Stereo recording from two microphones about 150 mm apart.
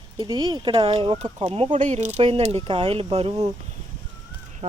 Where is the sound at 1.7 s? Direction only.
50° right (ahead or behind).